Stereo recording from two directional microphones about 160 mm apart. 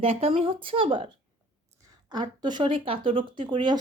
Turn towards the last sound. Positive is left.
turn(degrees=-30)  # may be behind; listen again after turning